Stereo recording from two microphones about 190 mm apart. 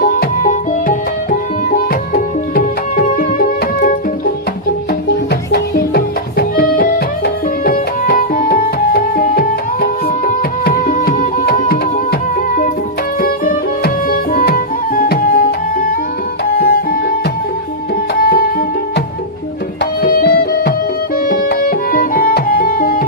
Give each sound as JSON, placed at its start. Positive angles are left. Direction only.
{"t": 0.0, "sound": "music", "side_deg": 50}
{"t": 5.0, "sound": "music", "side_deg": 60}
{"t": 7.6, "sound": "tabla", "side_deg": 50}
{"t": 10.2, "sound": "music", "side_deg": 50}
{"t": 13.2, "sound": "music", "side_deg": 50}
{"t": 16.6, "sound": "music", "side_deg": 55}
{"t": 19.8, "sound": "music", "side_deg": 55}